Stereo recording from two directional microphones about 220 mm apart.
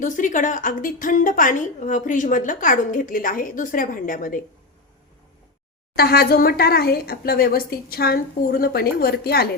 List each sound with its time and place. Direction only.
0.0 s a woman's voice: 35° left (ahead or behind)
6.0 s a woman's voice: 45° left (ahead or behind)